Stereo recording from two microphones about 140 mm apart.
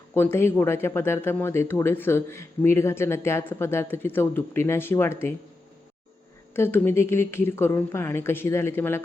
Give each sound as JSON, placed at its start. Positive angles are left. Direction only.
{"t": 0.1, "sound": "speech", "side_deg": 15}
{"t": 6.5, "sound": "speech", "side_deg": 15}